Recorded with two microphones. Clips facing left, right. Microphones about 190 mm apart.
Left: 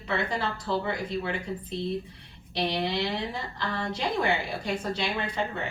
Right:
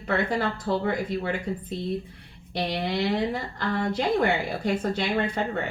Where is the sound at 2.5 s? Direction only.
50° right (ahead or behind).